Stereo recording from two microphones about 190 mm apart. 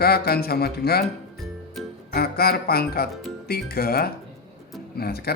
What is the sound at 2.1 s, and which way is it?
Speech, 55° left (ahead or behind).